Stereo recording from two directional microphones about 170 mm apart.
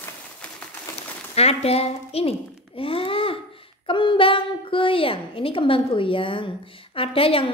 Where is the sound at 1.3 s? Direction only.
35° left (ahead or behind).